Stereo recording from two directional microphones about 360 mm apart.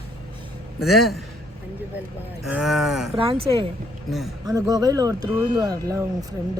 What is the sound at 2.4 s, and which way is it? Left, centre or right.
Speech, centre.